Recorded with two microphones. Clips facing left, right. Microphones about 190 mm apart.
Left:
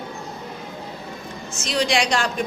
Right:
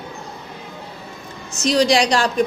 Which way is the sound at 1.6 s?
35° right (ahead or behind).